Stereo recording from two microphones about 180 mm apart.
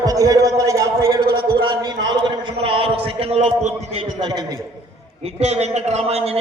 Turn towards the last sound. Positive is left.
turn(degrees=-35)  # may be behind; listen again after turning